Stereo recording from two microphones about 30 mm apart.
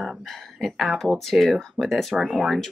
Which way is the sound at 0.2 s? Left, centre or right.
Centre.